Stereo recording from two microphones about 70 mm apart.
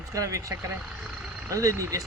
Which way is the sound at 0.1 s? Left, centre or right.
Right.